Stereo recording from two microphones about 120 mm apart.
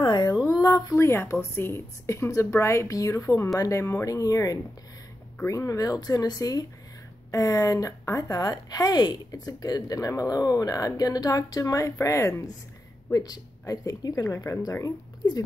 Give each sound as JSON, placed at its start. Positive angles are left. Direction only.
{"t": 0.0, "sound": "a woman's voice", "side_deg": 35}